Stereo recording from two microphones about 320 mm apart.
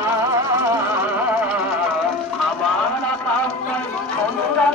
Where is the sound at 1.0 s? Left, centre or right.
Centre.